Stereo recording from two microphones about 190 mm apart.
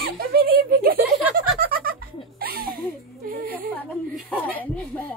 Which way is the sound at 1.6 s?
50° right (ahead or behind).